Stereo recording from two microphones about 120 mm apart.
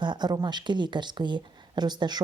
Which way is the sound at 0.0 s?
35° right (ahead or behind).